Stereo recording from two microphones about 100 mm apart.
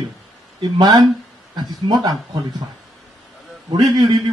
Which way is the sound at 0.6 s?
40° right (ahead or behind).